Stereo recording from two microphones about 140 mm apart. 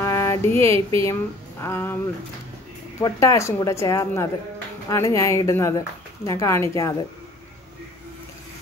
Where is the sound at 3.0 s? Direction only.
20° left (ahead or behind).